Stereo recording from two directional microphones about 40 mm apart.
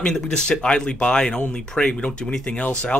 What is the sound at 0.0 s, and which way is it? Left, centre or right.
Speech, centre.